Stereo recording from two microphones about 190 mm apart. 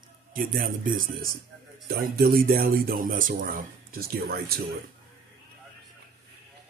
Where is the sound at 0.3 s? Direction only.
45° right (ahead or behind).